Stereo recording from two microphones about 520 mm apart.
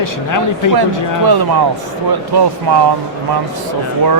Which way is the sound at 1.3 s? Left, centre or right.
Right.